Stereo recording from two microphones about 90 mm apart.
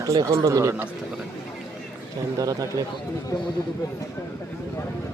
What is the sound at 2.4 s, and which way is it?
Speech, 40° right (ahead or behind).